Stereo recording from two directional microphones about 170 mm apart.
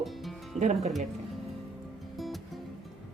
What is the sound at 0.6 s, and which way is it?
Speech, 40° right (ahead or behind).